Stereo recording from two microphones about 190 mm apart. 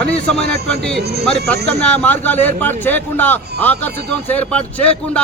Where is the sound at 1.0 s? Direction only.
60° right (ahead or behind).